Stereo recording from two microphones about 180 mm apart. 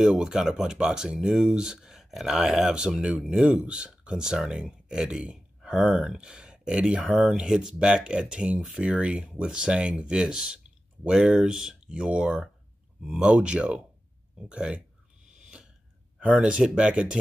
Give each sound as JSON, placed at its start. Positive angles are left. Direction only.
{"t": 0.0, "sound": "speech", "side_deg": -5}
{"t": 15.2, "sound": "owl", "side_deg": -45}
{"t": 16.2, "sound": "speech", "side_deg": -5}